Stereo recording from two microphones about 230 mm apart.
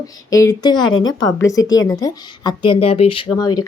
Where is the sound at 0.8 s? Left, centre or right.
Left.